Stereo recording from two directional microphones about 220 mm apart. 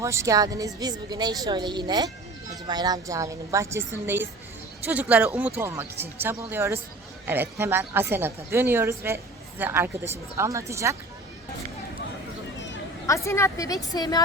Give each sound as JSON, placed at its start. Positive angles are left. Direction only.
{"t": 0.0, "sound": "a woman's voice", "side_deg": -15}
{"t": 13.1, "sound": "a woman's voice", "side_deg": 15}